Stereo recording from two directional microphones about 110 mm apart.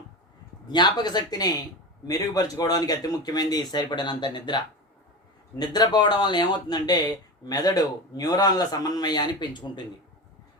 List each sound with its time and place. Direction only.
0.7 s speech: 40° left (ahead or behind)